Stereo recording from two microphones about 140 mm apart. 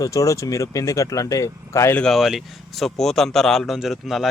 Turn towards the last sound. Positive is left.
turn(degrees=0)  # may be behind; listen again after turning